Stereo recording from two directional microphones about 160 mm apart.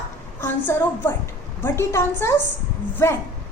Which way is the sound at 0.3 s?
15° left (ahead or behind).